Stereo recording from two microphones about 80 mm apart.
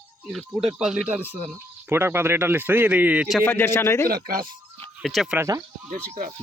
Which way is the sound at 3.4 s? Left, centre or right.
Left.